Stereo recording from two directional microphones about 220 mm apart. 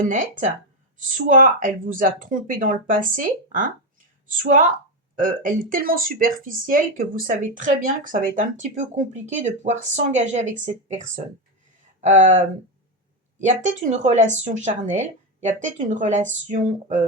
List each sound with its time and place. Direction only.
0.0 s speech: 35° right (ahead or behind)
13.4 s speech: 35° right (ahead or behind)